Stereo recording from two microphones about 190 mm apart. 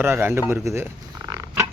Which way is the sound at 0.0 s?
10° right (ahead or behind).